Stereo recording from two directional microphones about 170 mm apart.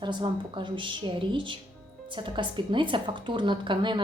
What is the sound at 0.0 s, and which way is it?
Speech, 25° right (ahead or behind).